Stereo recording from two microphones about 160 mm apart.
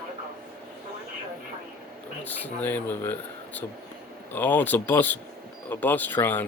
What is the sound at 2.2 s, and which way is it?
Speech, 10° left (ahead or behind).